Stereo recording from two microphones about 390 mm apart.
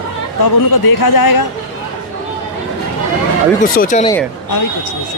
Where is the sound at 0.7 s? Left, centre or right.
Left.